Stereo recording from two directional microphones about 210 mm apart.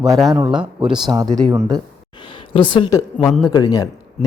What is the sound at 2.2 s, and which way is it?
Speech, 25° left (ahead or behind).